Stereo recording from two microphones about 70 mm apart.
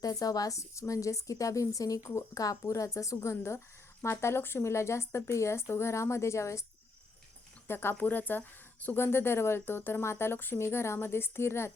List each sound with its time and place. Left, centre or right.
0.0 s a woman's voice: left
7.7 s speech: left
7.9 s speech: left